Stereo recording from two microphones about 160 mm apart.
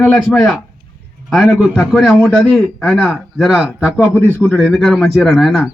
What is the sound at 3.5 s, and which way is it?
A man's voice, 5° right (ahead or behind).